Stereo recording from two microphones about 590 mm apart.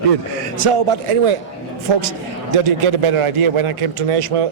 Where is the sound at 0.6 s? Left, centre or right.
Right.